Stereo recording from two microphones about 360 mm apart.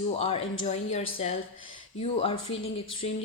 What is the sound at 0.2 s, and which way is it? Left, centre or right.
A woman's voice, centre.